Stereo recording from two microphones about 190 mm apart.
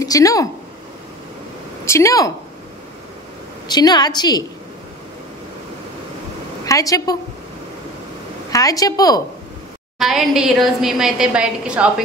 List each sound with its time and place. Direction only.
0.0 s speech: 20° left (ahead or behind)
1.9 s speech: 15° left (ahead or behind)
3.6 s a woman's voice: 20° left (ahead or behind)
6.6 s a woman's voice: 20° left (ahead or behind)
8.5 s a woman's voice: 20° left (ahead or behind)
9.9 s a woman's voice: centre (ahead or behind)